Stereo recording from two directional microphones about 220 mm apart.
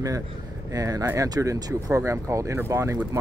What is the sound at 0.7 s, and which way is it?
Speech, 15° right (ahead or behind).